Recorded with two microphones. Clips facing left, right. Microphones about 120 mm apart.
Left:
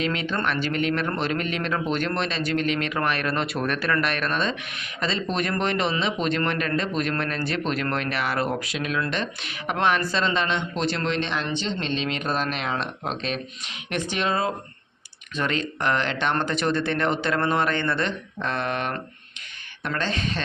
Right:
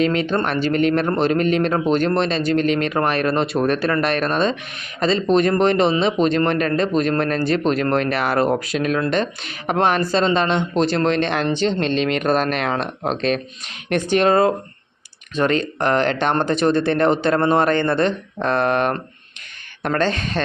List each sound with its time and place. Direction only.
0.0 s a man's voice: 40° right (ahead or behind)
15.4 s a man's voice: 40° right (ahead or behind)